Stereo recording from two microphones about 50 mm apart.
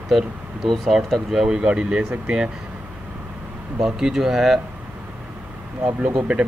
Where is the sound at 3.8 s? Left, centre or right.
Centre.